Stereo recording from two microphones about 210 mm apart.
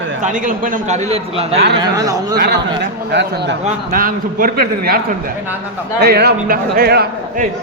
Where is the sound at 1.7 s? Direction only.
15° right (ahead or behind).